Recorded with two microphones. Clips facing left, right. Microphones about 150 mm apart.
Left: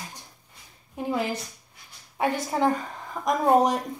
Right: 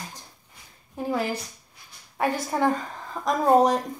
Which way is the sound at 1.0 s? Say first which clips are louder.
Right 1 dB; 20° left (ahead or behind).